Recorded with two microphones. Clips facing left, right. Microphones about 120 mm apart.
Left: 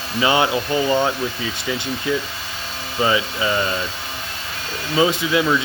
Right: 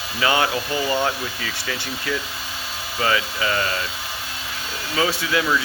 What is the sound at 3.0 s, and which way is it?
Speech, 20° left (ahead or behind).